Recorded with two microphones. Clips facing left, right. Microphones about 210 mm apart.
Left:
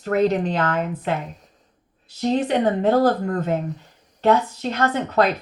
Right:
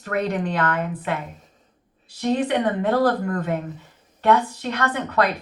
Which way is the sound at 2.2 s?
25° left (ahead or behind).